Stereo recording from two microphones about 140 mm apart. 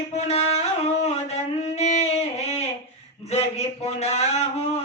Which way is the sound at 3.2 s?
50° left (ahead or behind).